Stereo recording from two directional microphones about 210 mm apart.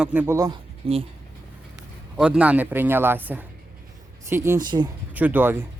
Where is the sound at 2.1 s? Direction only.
5° right (ahead or behind); by 4.9 s 20° right (ahead or behind).